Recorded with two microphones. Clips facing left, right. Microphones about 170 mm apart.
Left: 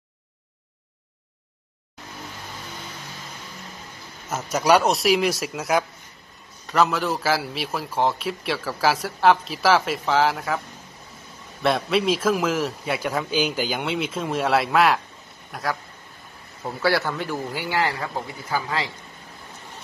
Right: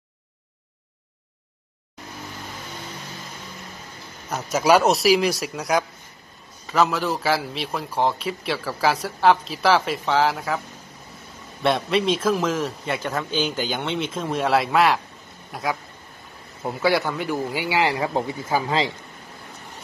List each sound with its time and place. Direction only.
4.3 s a man's voice: centre (ahead or behind)
11.6 s a man's voice: centre (ahead or behind)
16.6 s speech: 15° right (ahead or behind)
17.9 s speech: 25° right (ahead or behind)